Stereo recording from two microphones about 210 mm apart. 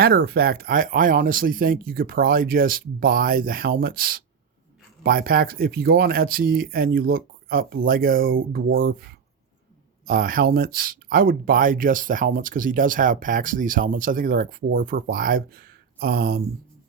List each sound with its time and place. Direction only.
0.0 s speech: 45° right (ahead or behind)